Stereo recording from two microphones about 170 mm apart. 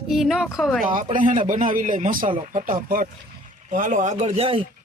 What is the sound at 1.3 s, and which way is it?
Speech, 50° right (ahead or behind).